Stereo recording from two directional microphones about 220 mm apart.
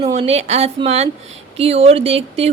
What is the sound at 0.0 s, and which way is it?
Speech, 30° right (ahead or behind).